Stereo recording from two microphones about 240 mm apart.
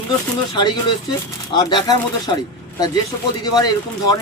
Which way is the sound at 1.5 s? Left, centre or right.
Centre.